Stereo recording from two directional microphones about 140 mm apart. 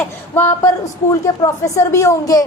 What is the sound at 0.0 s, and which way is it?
Speech, 15° left (ahead or behind).